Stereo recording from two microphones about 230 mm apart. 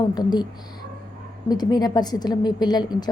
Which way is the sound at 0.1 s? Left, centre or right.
Centre.